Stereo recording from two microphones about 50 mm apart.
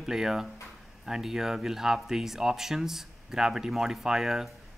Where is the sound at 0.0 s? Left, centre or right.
Centre.